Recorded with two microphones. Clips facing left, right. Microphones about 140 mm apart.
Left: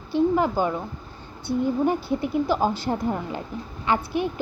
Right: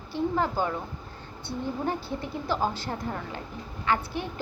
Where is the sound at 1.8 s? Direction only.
15° left (ahead or behind).